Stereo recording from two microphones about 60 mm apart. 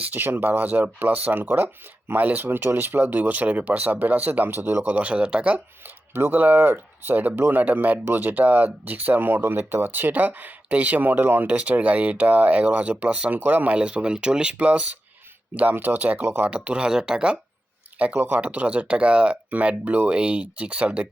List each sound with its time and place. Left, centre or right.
0.0 s speech: right
4.8 s speech: right
6.1 s speech: right
13.7 s speech: centre; by 16.5 s right
16.5 s speech: right
18.3 s speech: right